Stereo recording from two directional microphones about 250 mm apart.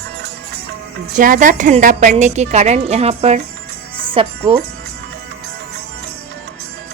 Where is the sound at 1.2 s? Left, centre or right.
Right.